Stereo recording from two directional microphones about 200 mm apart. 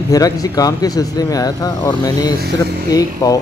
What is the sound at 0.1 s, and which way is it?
Speech, 15° left (ahead or behind).